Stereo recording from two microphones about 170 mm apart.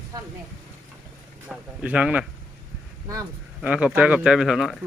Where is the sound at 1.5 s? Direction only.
10° right (ahead or behind).